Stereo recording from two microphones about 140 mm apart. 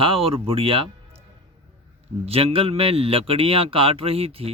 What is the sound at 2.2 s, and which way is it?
Speech, 45° right (ahead or behind).